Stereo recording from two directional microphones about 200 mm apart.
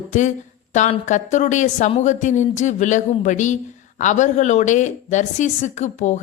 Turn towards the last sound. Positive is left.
turn(degrees=35)  # may be behind; listen again after turning